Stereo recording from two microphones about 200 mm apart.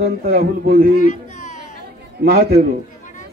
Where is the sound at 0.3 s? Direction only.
50° right (ahead or behind).